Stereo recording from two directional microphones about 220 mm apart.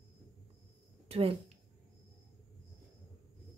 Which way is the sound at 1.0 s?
25° right (ahead or behind).